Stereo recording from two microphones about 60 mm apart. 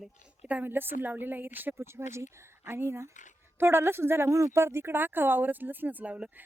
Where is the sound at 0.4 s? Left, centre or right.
Right.